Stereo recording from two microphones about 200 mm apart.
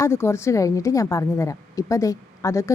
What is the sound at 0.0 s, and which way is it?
A woman's voice, 15° left (ahead or behind).